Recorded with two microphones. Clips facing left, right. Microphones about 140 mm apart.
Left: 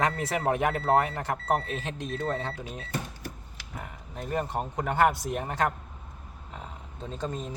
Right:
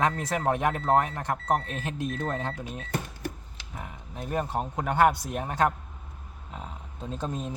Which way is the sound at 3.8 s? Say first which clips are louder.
Right 1 dB; 5° right (ahead or behind).